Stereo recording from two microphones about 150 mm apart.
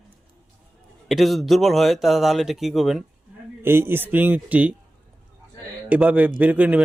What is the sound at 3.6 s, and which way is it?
Speech, 15° right (ahead or behind).